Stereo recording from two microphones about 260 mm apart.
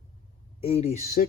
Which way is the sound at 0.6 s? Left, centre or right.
Left.